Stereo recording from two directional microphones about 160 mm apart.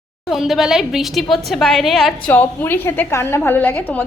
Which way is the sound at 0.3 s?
Centre (ahead or behind).